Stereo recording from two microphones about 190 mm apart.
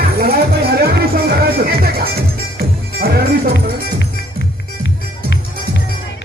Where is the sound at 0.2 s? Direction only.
55° right (ahead or behind).